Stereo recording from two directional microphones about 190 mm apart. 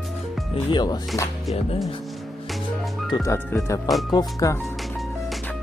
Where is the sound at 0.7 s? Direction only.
20° left (ahead or behind).